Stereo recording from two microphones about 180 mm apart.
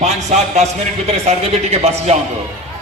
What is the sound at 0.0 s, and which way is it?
A man's voice, 40° right (ahead or behind).